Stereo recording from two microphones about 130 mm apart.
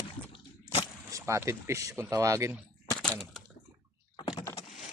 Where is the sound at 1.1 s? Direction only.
25° right (ahead or behind).